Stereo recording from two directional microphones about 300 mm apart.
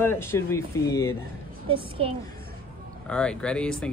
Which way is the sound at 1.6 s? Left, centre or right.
Centre.